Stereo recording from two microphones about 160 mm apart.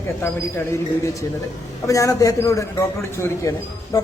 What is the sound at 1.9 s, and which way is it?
A man's voice, 20° left (ahead or behind).